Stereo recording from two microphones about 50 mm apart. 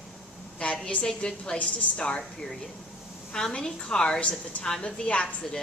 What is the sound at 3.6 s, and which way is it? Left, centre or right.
A woman's voice, centre.